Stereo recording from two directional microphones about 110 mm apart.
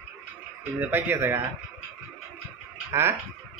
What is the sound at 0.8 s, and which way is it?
Speech, 20° right (ahead or behind).